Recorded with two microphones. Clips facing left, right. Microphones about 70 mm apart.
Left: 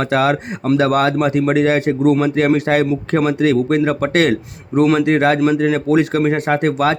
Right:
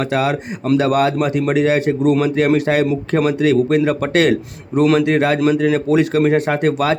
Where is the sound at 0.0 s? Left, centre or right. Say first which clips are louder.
Left 2 dB; left.